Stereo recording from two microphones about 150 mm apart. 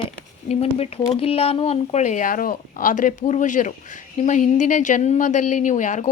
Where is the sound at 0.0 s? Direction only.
40° left (ahead or behind).